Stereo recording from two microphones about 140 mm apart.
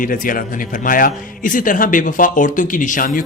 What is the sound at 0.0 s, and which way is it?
A man's voice, 80° left.